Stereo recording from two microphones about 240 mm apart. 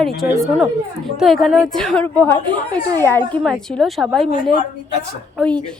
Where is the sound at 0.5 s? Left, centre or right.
Centre.